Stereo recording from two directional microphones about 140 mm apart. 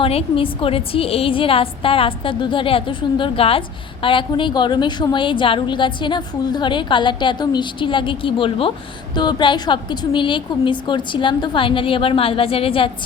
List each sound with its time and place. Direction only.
0.0 s a woman's voice: 40° left (ahead or behind)